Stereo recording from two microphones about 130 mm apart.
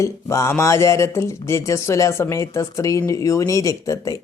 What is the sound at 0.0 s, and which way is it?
Speech, 20° left (ahead or behind).